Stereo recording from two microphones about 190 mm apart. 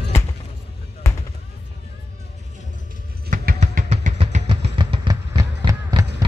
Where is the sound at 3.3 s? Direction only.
45° right (ahead or behind); by 5.4 s 25° right (ahead or behind).